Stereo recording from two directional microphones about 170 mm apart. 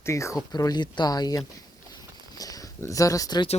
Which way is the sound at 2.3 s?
20° left (ahead or behind).